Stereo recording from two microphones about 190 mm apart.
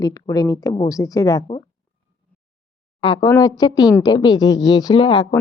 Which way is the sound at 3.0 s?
25° left (ahead or behind).